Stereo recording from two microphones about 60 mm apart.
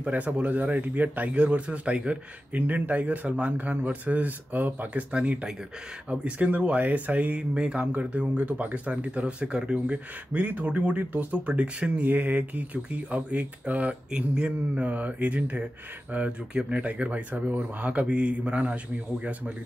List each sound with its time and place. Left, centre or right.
0.0 s speech: right
5.1 s speech: right